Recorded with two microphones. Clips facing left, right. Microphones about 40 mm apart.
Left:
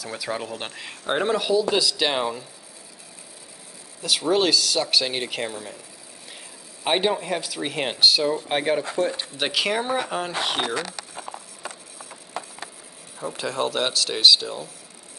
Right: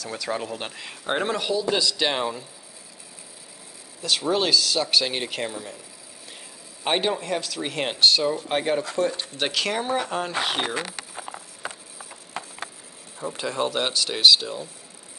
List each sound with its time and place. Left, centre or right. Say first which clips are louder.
0.0 s speech: even; centre
4.0 s speech: left 2 dB; centre
6.8 s speech: left 2 dB; centre
10.7 s speech: left 1 dB; right
11.1 s a sound: left 1 dB; centre
13.2 s speech: even; centre